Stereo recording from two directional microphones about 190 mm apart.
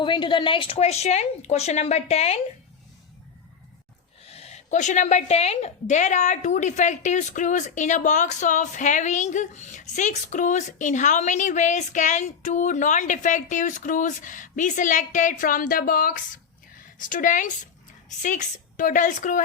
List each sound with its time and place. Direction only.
0.0 s a woman's voice: 25° left (ahead or behind)
4.3 s a woman's voice: 35° left (ahead or behind)